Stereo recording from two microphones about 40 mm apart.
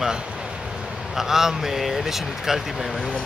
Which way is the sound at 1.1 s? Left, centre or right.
Centre.